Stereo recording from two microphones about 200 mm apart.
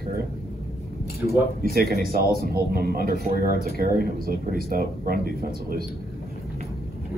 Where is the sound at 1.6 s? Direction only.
50° right (ahead or behind).